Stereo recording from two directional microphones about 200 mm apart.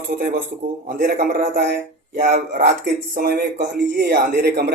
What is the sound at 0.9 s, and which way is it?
A man's voice, 55° right (ahead or behind).